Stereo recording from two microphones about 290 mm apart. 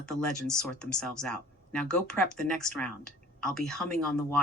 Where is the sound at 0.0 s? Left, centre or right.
Centre.